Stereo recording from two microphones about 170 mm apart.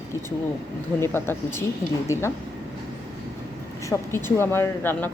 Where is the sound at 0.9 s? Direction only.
15° left (ahead or behind).